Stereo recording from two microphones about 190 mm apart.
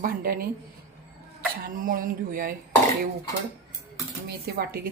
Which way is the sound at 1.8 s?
45° right (ahead or behind).